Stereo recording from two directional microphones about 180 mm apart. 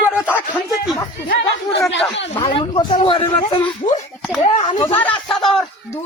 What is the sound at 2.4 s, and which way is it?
Speech, 25° left (ahead or behind).